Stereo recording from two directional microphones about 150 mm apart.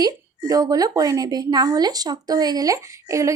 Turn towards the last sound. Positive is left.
turn(degrees=-20)  # may be behind; listen again after turning